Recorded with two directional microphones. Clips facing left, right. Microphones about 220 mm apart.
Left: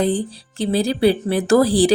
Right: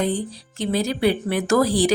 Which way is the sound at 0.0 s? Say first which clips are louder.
Left 4 dB; 30° left (ahead or behind).